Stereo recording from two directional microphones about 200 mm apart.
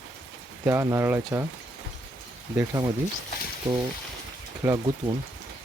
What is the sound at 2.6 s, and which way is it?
Speech, 20° right (ahead or behind).